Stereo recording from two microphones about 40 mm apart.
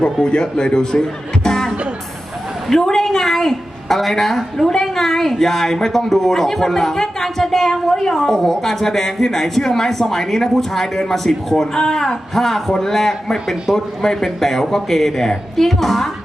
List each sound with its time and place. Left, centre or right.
0.0 s a man's voice: left
1.5 s music: centre
2.6 s a woman's voice: centre